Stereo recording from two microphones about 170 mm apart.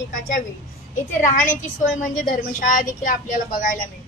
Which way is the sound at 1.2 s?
45° left (ahead or behind).